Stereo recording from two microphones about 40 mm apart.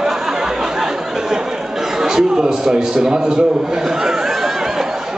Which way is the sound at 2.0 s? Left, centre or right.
Centre.